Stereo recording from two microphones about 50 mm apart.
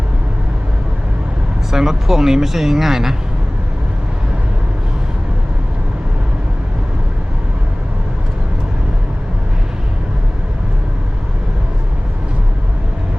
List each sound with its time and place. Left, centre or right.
1.7 s speech: centre